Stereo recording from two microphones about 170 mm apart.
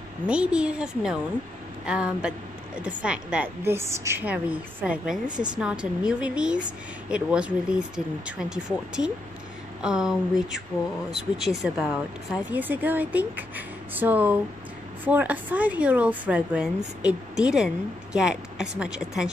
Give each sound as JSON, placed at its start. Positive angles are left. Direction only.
{"t": 0.3, "sound": "a woman's voice", "side_deg": -5}
{"t": 5.3, "sound": "speech", "side_deg": -25}
{"t": 5.6, "sound": "a woman's voice", "side_deg": -5}